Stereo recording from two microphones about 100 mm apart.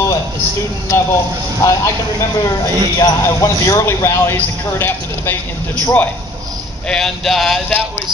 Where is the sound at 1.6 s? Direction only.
30° left (ahead or behind).